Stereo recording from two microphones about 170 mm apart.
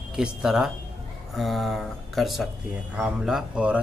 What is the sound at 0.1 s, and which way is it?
Speech, 5° right (ahead or behind).